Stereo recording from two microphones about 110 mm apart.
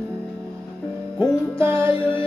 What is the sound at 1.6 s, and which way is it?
Music, 20° right (ahead or behind).